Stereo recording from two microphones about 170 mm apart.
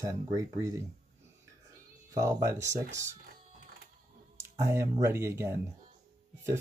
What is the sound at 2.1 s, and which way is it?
Speech, 20° right (ahead or behind).